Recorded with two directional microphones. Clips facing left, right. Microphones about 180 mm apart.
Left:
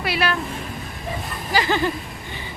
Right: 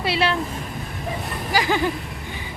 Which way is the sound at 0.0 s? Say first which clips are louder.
Right 1 dB; 25° right (ahead or behind).